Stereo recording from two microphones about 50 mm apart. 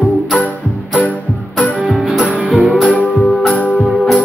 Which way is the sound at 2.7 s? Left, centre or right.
Left.